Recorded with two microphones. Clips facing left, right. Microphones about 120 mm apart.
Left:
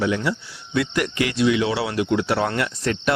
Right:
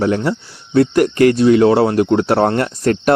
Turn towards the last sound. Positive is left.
turn(degrees=-45)  # may be behind; listen again after turning